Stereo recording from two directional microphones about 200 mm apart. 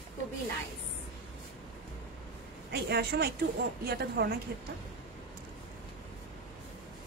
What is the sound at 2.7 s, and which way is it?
A woman's voice, 55° right (ahead or behind).